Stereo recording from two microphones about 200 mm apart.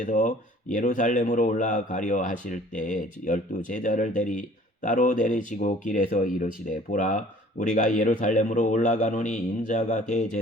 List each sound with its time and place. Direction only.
0.0 s speech: 35° left (ahead or behind)